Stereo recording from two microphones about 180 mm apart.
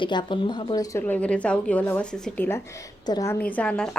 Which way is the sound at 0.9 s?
10° left (ahead or behind).